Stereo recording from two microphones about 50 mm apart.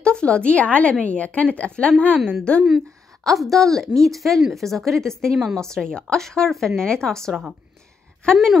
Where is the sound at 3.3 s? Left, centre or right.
Centre.